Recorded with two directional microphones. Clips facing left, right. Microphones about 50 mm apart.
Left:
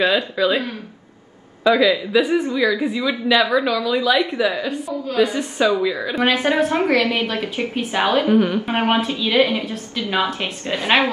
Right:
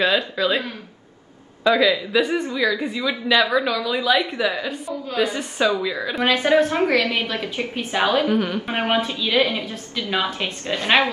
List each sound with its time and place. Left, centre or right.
0.0 s a woman's voice: centre
6.7 s a woman's voice: left
7.2 s a woman's voice: centre
8.0 s a woman's voice: left
8.3 s a woman's voice: centre
8.7 s a woman's voice: left
10.7 s a woman's voice: centre